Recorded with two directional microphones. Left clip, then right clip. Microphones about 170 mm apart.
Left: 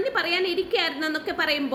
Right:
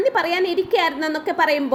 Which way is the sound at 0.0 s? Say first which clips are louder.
Right 5 dB; 20° right (ahead or behind).